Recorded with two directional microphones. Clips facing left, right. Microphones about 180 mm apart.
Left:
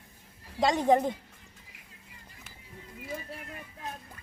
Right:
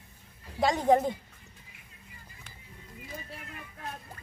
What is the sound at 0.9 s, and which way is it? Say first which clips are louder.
Speech: right 1 dB; 10° right (ahead or behind).